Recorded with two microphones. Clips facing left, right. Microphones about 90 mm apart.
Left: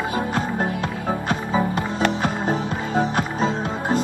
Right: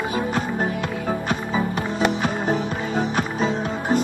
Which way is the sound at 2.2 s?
35° left (ahead or behind).